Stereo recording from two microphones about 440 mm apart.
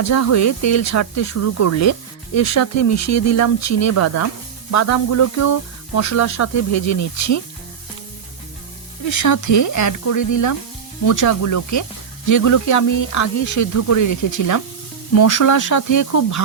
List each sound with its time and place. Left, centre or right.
0.0 s speech: left
9.0 s speech: left